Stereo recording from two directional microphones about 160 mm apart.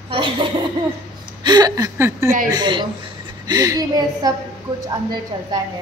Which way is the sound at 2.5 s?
30° right (ahead or behind).